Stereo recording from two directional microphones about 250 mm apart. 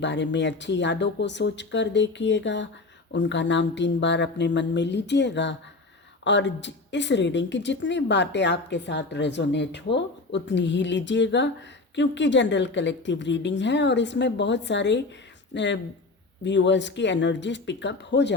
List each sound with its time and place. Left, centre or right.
0.0 s a woman's voice: left